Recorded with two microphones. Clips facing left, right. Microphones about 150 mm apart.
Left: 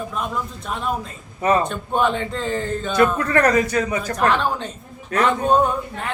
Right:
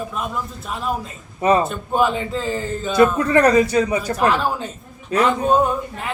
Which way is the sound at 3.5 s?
25° right (ahead or behind).